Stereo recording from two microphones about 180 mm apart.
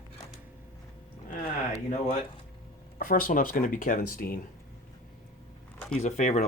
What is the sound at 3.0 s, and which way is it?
Speech, 50° left (ahead or behind).